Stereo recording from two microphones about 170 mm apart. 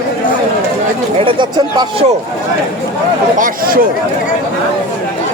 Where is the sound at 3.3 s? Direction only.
55° right (ahead or behind).